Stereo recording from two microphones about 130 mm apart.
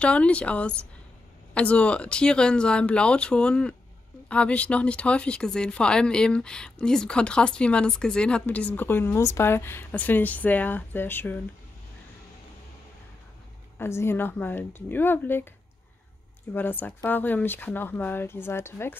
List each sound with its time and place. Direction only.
0.0 s speech: 10° left (ahead or behind)
13.7 s speech: 20° left (ahead or behind)
16.5 s speech: 15° left (ahead or behind)